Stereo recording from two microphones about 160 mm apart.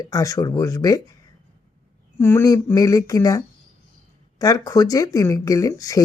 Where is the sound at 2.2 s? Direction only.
15° left (ahead or behind).